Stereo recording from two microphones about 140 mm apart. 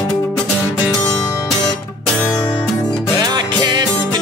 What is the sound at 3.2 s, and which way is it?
Music, 30° right (ahead or behind).